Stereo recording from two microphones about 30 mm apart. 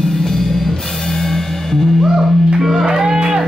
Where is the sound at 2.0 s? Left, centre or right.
Centre.